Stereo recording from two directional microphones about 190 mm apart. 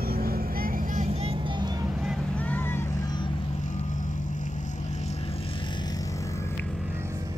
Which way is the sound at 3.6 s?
40° left (ahead or behind).